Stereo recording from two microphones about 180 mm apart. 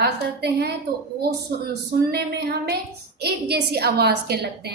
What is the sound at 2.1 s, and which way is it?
A woman's voice, 65° right (ahead or behind).